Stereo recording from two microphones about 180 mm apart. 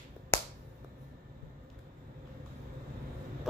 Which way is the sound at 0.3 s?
15° left (ahead or behind).